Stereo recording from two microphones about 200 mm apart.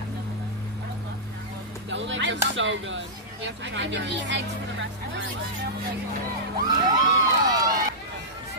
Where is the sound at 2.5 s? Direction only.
65° right (ahead or behind).